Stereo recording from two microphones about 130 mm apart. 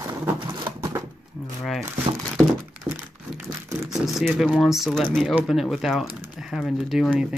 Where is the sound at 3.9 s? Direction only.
Centre (ahead or behind).